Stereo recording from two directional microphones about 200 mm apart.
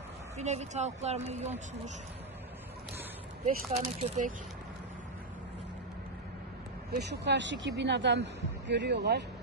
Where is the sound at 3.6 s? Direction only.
35° right (ahead or behind).